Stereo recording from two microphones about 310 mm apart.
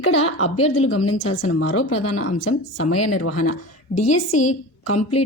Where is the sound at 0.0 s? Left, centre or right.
Left.